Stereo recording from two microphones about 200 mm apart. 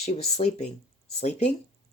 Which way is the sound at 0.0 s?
35° left (ahead or behind).